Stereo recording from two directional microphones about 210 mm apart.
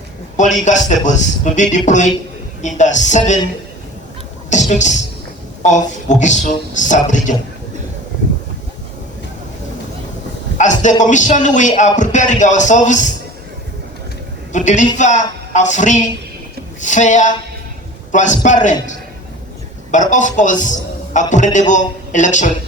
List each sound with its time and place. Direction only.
0.3 s a man's voice: 35° left (ahead or behind)
4.7 s a man's voice: 35° left (ahead or behind)
10.6 s a sound: 35° left (ahead or behind)
11.0 s a man's voice: 35° left (ahead or behind)
14.5 s a man's voice: 35° left (ahead or behind)